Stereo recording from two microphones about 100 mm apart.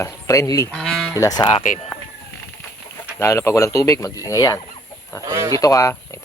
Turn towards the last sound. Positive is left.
turn(degrees=35)  # may be behind; listen again after turning